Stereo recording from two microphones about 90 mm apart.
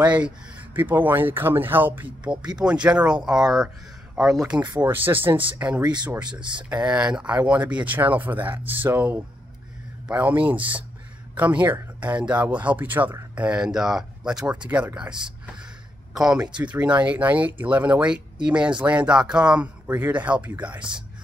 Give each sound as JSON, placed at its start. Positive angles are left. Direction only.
{"t": 0.0, "sound": "speech", "side_deg": -15}
{"t": 2.6, "sound": "speech", "side_deg": -10}
{"t": 4.8, "sound": "speech", "side_deg": -20}
{"t": 5.8, "sound": "speech", "side_deg": -55}
{"t": 6.7, "sound": "speech", "side_deg": -15}